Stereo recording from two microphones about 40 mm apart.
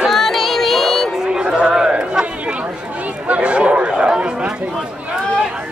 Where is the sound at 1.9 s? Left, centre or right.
Right.